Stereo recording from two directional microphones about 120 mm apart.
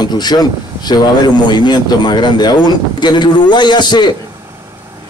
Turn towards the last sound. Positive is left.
turn(degrees=40)  # may be behind; listen again after turning